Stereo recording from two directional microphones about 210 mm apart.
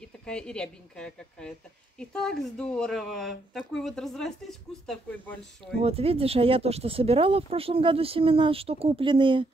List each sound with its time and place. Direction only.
0.2 s speech: 5° left (ahead or behind)
5.8 s speech: 25° right (ahead or behind)